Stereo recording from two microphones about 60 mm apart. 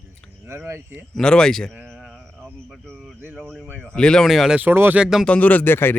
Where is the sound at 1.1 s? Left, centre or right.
Centre.